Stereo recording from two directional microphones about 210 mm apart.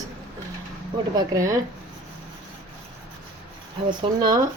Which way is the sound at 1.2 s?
15° right (ahead or behind).